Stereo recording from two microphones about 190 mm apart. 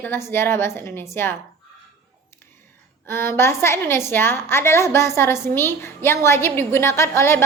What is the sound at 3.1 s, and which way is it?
A woman's voice, 15° left (ahead or behind).